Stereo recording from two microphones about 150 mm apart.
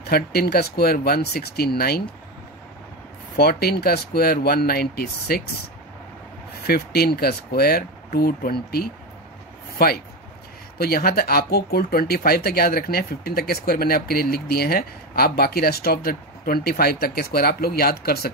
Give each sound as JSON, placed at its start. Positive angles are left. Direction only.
{"t": 0.0, "sound": "speech", "side_deg": 90}
{"t": 3.3, "sound": "speech", "side_deg": 90}
{"t": 6.6, "sound": "speech", "side_deg": 90}